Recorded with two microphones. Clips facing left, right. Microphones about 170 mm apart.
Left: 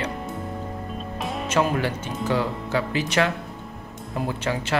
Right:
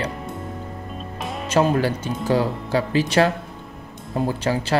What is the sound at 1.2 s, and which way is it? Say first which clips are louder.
Music: left 1 dB; centre (ahead or behind).